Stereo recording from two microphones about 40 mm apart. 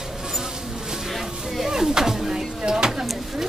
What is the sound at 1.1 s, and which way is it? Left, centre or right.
Music, centre.